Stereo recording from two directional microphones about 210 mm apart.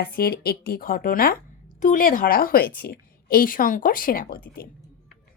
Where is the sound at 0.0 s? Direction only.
45° left (ahead or behind).